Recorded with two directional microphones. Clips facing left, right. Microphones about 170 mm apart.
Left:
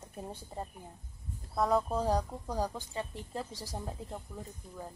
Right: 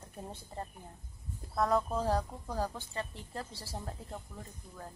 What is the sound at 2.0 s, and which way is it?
A woman's voice, 15° left (ahead or behind).